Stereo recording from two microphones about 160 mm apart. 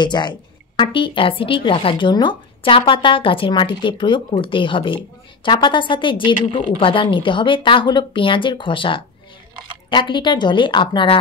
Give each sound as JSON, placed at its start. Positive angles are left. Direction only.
{"t": 0.0, "sound": "a woman's voice", "side_deg": 30}